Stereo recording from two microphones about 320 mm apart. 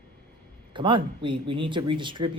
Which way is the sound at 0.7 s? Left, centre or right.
Centre.